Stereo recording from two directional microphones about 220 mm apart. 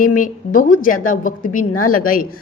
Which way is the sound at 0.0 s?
35° left (ahead or behind).